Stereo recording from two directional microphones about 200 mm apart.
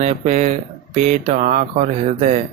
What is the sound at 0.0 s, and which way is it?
Speech, 35° right (ahead or behind).